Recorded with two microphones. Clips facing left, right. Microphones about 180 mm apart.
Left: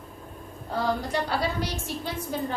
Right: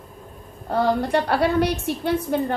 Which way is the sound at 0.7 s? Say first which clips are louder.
Right 7 dB; 60° right (ahead or behind).